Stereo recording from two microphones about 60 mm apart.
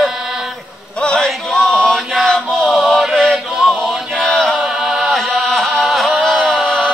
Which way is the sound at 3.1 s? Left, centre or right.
Centre.